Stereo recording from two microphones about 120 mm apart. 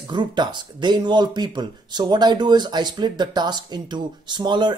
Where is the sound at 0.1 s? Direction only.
40° right (ahead or behind).